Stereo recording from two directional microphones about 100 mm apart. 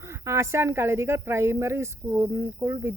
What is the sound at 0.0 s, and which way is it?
Speech, 25° right (ahead or behind).